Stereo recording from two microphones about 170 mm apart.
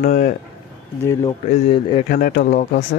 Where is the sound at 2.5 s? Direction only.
50° left (ahead or behind).